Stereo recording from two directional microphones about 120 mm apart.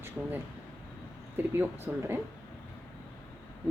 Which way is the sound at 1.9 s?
20° right (ahead or behind).